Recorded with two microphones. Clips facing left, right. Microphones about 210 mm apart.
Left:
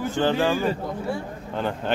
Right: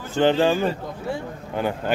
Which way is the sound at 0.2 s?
20° right (ahead or behind).